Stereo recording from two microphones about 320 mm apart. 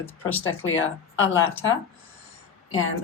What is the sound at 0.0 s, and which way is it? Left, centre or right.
Speech, centre.